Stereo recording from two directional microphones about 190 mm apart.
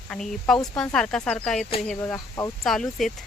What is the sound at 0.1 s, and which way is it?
Speech, 5° left (ahead or behind).